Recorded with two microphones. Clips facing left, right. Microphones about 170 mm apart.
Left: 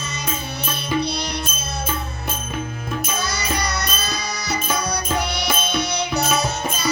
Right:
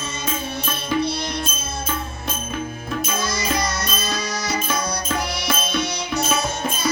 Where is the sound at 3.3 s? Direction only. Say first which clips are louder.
Right 1 dB; 65° left (ahead or behind).